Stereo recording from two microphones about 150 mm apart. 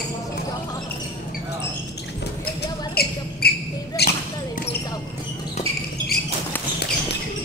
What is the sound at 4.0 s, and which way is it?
Basketball bounce, 90° left.